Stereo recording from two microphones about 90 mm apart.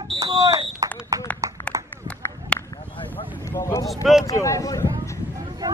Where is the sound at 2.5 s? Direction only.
10° left (ahead or behind).